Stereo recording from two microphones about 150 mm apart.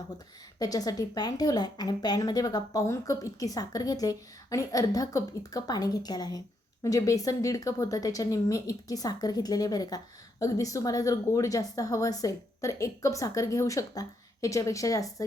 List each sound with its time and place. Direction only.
0.6 s a woman's voice: 25° left (ahead or behind)